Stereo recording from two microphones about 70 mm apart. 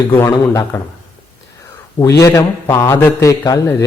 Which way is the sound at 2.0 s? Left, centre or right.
Left.